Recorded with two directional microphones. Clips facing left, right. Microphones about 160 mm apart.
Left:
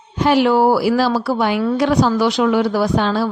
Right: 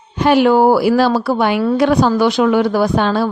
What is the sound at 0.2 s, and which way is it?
A woman's voice, 55° right (ahead or behind).